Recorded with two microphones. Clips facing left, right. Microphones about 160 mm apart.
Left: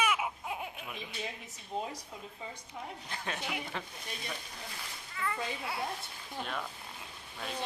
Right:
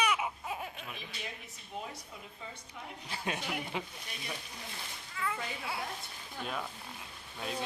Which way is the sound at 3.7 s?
15° right (ahead or behind).